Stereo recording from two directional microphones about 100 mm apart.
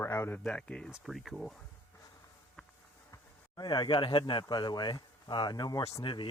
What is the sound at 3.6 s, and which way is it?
Speech, 45° left (ahead or behind).